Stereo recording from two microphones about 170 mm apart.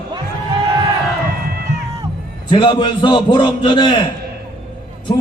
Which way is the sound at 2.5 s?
30° left (ahead or behind).